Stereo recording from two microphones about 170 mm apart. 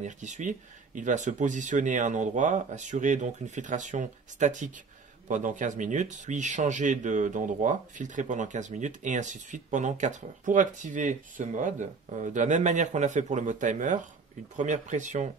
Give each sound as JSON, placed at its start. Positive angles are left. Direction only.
{"t": 0.0, "sound": "speech", "side_deg": -45}